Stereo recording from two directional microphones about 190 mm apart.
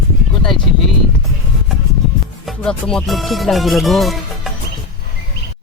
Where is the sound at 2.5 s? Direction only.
5° left (ahead or behind).